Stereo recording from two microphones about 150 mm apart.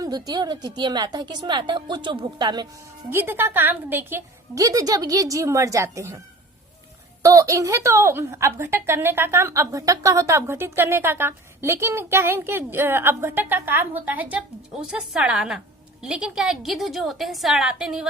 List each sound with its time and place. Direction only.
0.0 s a woman's voice: 25° right (ahead or behind)
3.1 s a woman's voice: 15° right (ahead or behind)
7.2 s a woman's voice: 20° right (ahead or behind); by 18.1 s 5° right (ahead or behind)